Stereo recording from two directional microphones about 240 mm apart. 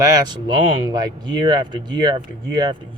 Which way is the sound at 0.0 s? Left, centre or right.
Centre.